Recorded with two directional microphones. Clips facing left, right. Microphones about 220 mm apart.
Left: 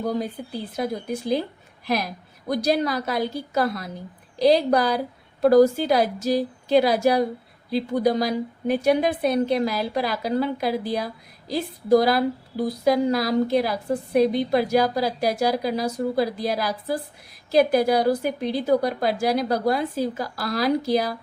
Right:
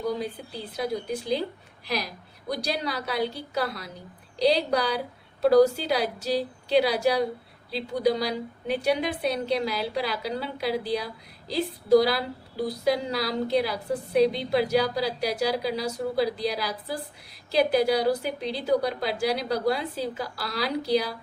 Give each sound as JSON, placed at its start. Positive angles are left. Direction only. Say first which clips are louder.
{"t": 0.8, "sound": "a woman's voice", "louder": "left 1 dB", "side_deg": 50}
{"t": 2.5, "sound": "a woman's voice", "louder": "left 7 dB", "side_deg": 50}